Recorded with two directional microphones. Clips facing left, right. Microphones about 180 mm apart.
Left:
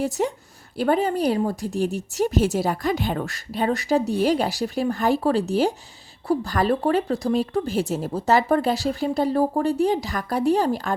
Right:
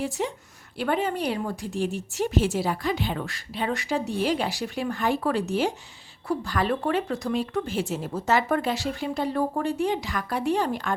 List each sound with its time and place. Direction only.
0.0 s a woman's voice: 45° left (ahead or behind)